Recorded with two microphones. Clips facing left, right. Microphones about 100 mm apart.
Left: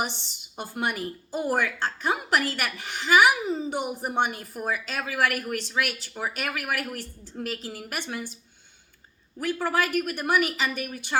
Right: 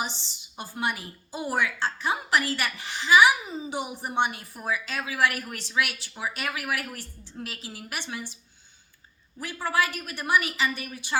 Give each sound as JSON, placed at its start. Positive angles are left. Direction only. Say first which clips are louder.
{"t": 0.0, "sound": "a woman's voice", "louder": "left 2 dB", "side_deg": 55}
{"t": 9.4, "sound": "a woman's voice", "louder": "left 2 dB", "side_deg": 50}